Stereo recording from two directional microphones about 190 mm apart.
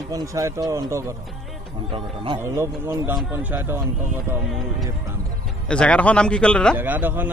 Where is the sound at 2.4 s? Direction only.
15° right (ahead or behind).